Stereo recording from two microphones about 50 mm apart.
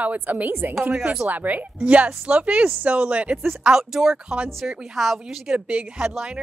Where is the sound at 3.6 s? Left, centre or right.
Centre.